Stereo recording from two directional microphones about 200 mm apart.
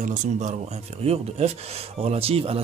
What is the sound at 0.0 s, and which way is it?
Speech, 35° right (ahead or behind).